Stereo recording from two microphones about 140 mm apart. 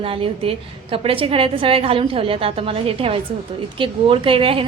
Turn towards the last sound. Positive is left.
turn(degrees=-40)  # may be behind; listen again after turning